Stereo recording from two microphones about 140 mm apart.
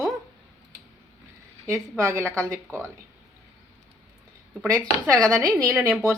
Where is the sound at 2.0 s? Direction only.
20° right (ahead or behind).